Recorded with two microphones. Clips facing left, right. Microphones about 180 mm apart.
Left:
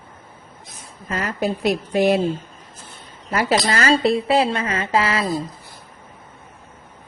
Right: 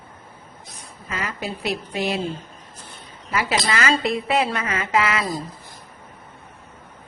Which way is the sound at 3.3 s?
40° left (ahead or behind).